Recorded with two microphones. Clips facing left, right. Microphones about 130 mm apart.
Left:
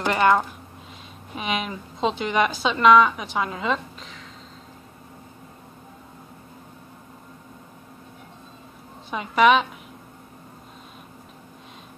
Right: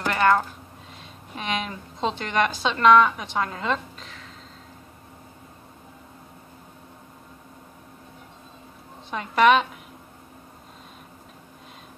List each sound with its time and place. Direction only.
0.0 s speech: 20° left (ahead or behind)
1.3 s a woman's voice: 5° left (ahead or behind)
9.1 s a woman's voice: 5° left (ahead or behind)